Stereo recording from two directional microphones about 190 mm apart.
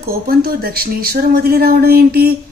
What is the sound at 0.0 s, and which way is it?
A woman's voice, 50° right (ahead or behind).